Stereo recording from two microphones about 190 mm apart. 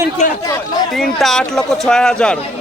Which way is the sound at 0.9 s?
Centre (ahead or behind).